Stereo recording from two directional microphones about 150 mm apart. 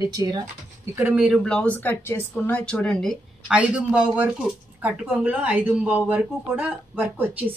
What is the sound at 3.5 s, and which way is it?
Speech, 10° right (ahead or behind).